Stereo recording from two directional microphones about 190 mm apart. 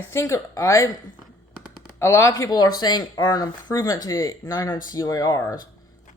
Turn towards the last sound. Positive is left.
turn(degrees=20)  # may be behind; listen again after turning